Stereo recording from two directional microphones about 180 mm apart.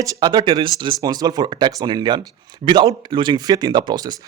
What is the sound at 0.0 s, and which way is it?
Speech, 20° right (ahead or behind).